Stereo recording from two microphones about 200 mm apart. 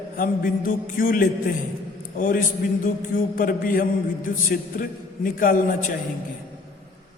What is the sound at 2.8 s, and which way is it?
Mantra, 45° left (ahead or behind).